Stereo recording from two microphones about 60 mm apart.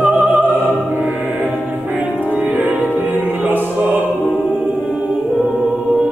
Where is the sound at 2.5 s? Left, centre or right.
Right.